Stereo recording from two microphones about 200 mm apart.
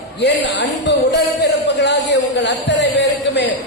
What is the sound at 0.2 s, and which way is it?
A man's voice, 60° left (ahead or behind).